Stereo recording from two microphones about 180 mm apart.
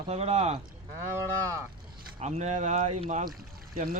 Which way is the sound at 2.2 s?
40° right (ahead or behind).